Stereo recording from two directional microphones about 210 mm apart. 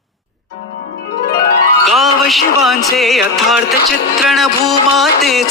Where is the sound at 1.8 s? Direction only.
Centre (ahead or behind).